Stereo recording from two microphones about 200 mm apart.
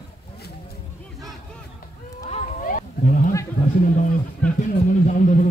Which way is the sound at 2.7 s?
40° left (ahead or behind).